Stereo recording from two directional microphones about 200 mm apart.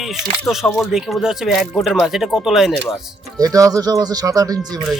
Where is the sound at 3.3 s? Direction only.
15° right (ahead or behind).